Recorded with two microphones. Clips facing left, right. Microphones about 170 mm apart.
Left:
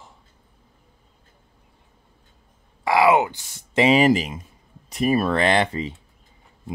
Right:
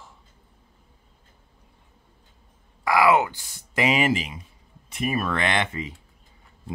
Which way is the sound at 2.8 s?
20° left (ahead or behind).